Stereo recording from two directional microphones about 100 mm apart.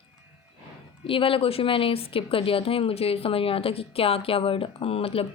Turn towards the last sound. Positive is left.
turn(degrees=70)  # may be behind; listen again after turning